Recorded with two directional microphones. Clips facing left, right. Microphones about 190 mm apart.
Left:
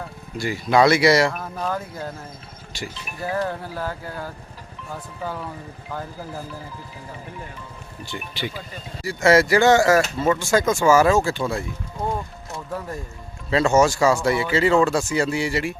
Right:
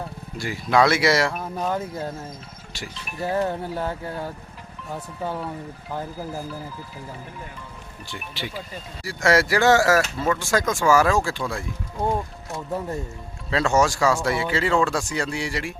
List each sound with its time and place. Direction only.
0.3 s speech: centre (ahead or behind)
1.6 s speech: 25° right (ahead or behind)
2.7 s speech: centre (ahead or behind)
3.3 s speech: 25° right (ahead or behind)
8.0 s speech: centre (ahead or behind)
13.5 s speech: centre (ahead or behind)